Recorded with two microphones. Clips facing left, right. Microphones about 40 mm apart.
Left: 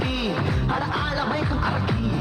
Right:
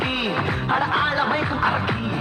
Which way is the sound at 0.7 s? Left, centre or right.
Right.